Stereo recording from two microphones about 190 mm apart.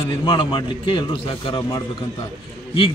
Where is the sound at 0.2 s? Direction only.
25° left (ahead or behind).